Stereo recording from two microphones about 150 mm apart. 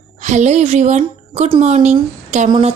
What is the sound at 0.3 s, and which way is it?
Speech, 50° right (ahead or behind).